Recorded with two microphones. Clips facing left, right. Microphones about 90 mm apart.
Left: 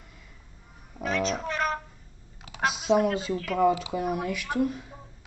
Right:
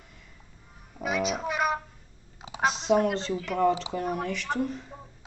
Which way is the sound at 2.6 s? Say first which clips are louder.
Right 1 dB; 5° left (ahead or behind).